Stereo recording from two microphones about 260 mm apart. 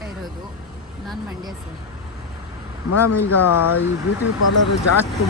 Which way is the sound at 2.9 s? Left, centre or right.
Left.